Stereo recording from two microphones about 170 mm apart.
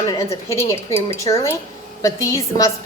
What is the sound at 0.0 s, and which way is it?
A woman's voice, 20° left (ahead or behind).